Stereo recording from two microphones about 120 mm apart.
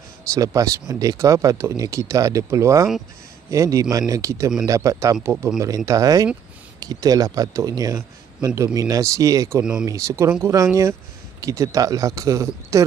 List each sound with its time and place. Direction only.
0.3 s speech: 30° right (ahead or behind)